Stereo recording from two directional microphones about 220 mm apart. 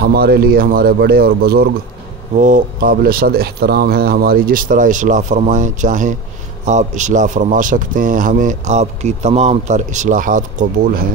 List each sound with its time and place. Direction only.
0.0 s a man's voice: 45° right (ahead or behind)